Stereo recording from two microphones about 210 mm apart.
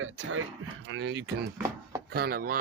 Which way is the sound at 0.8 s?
60° right (ahead or behind).